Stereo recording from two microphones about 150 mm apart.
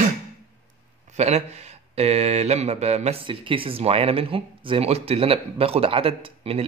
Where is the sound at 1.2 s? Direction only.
45° right (ahead or behind).